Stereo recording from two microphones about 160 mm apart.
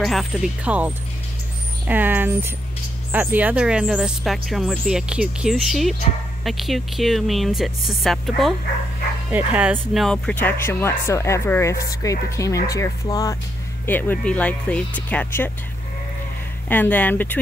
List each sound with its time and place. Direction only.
0.0 s speech: centre (ahead or behind)
10.0 s speech: 5° left (ahead or behind)
16.6 s speech: 10° left (ahead or behind)